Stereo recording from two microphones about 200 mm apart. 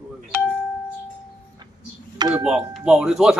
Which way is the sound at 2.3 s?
5° right (ahead or behind).